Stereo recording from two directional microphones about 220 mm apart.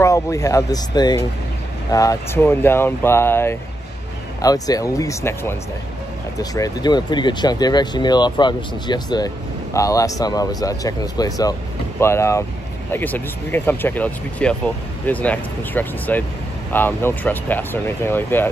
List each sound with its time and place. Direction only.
0.0 s speech: 15° left (ahead or behind)